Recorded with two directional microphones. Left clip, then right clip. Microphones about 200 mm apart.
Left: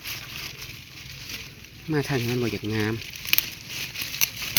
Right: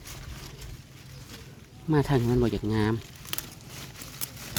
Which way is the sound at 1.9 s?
10° right (ahead or behind).